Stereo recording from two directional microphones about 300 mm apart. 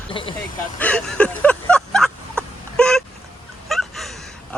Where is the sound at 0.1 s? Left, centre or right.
Centre.